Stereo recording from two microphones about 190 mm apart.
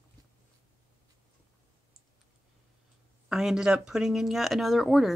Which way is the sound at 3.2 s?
5° right (ahead or behind).